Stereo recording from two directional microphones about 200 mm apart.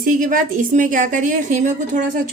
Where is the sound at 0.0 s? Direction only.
40° right (ahead or behind).